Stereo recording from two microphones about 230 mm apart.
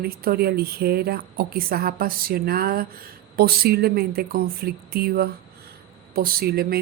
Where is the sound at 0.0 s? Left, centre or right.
Right.